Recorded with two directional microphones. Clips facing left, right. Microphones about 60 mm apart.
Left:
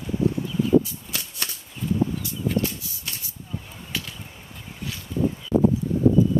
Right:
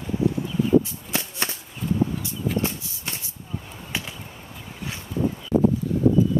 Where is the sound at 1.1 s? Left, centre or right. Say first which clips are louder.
Right 6 dB; right.